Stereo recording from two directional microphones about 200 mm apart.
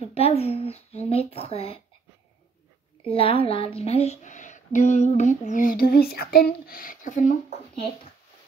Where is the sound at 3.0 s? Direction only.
25° left (ahead or behind).